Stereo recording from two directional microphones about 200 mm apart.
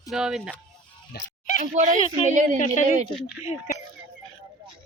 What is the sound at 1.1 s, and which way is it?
Speech, 50° left (ahead or behind).